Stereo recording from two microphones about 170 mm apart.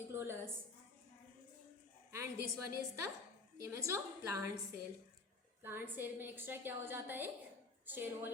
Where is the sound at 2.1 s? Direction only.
15° right (ahead or behind).